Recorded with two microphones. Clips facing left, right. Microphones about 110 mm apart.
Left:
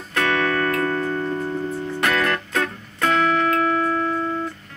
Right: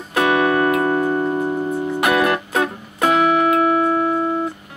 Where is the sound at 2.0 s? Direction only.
15° right (ahead or behind).